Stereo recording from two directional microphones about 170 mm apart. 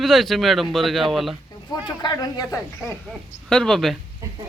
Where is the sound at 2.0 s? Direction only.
20° left (ahead or behind).